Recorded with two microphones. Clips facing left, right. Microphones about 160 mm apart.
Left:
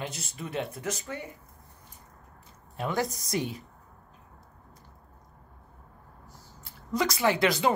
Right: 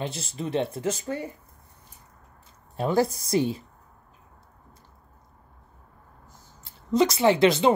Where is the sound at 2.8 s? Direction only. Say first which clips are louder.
Right 7 dB; 30° right (ahead or behind).